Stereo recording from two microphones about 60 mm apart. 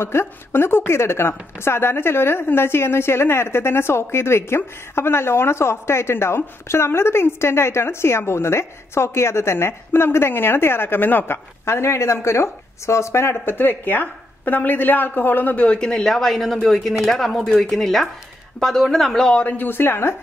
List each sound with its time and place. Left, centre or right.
0.0 s speech: left
11.6 s speech: left
15.6 s speech: centre
19.3 s speech: left